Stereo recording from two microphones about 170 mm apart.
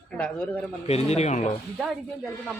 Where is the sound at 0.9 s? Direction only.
40° left (ahead or behind).